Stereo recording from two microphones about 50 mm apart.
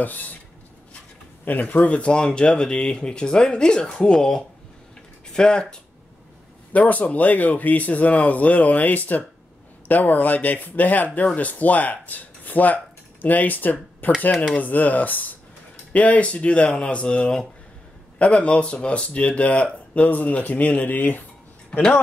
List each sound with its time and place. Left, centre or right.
0.0 s speech: left
1.4 s speech: left; by 5.8 s centre
6.7 s speech: left
14.3 s speech: centre
14.6 s speech: left